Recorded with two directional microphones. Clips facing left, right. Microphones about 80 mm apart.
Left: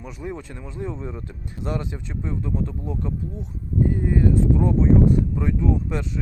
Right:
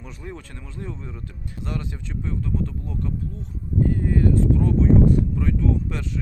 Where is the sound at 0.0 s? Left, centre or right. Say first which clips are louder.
Left 5 dB; centre.